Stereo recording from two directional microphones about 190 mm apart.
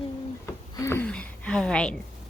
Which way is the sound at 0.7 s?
15° left (ahead or behind).